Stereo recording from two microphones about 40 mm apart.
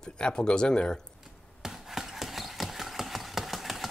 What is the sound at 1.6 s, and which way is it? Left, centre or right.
Engine, centre.